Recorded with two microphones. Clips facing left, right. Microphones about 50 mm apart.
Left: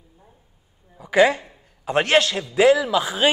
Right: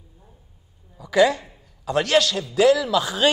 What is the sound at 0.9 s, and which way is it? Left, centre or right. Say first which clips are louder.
A woman's voice: left 1 dB; left.